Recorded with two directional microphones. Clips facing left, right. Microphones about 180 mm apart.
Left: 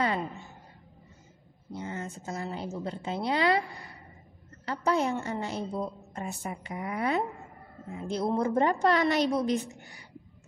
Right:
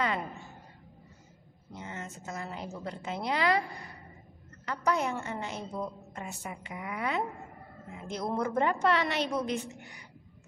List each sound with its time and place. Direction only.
1.7 s a woman's voice: 35° left (ahead or behind)
4.6 s a woman's voice: 30° left (ahead or behind)